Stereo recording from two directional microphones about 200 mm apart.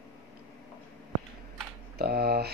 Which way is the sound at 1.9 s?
50° right (ahead or behind).